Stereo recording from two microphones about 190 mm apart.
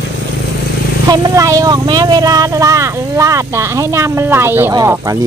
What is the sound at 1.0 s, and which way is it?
Speech, 15° right (ahead or behind).